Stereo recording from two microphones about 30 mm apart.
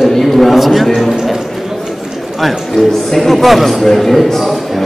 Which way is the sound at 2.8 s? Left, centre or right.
Left.